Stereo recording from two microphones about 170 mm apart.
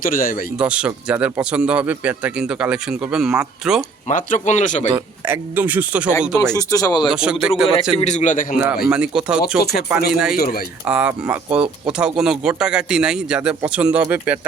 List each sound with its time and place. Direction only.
0.0 s speech: 55° left (ahead or behind)
0.5 s speech: 5° right (ahead or behind)
4.1 s speech: 45° left (ahead or behind)
5.2 s speech: 10° right (ahead or behind)
6.5 s speech: 20° left (ahead or behind)
7.1 s speech: 5° right (ahead or behind)
7.9 s speech: 45° left (ahead or behind)
8.5 s speech: 5° right (ahead or behind)
9.6 s speech: 70° left (ahead or behind)
10.1 s speech: 5° right (ahead or behind)
10.3 s speech: 65° left (ahead or behind)
10.8 s speech: 5° right (ahead or behind)